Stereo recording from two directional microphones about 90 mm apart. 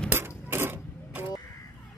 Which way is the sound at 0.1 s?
25° right (ahead or behind).